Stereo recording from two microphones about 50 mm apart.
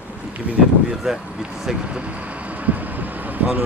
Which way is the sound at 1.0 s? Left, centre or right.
Centre.